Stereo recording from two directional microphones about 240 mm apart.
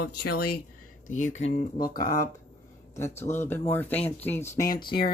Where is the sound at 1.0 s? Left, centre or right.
Left.